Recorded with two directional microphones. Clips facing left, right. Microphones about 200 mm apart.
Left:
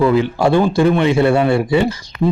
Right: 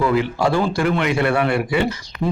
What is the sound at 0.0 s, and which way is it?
A man's voice, 25° left (ahead or behind).